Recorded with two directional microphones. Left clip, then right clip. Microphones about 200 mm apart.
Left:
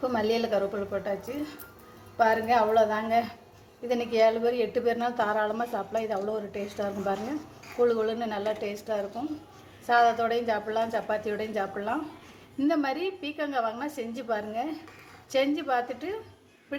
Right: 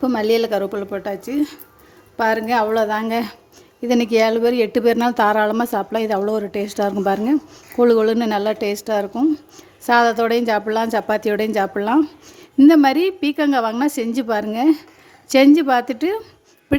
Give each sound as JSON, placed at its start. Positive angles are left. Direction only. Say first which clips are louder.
{"t": 0.0, "sound": "speech", "louder": "right 9 dB", "side_deg": -50}